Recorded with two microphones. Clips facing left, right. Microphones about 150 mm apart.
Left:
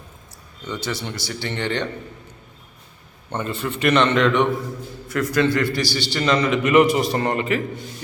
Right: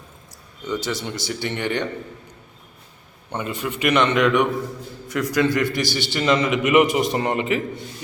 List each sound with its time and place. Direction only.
0.7 s a man's voice: 15° right (ahead or behind)
3.3 s a man's voice: 10° right (ahead or behind)